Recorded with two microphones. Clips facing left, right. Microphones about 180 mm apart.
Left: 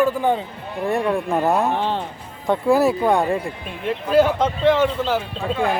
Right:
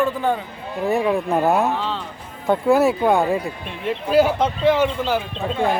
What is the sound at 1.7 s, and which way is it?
Music, 55° left (ahead or behind).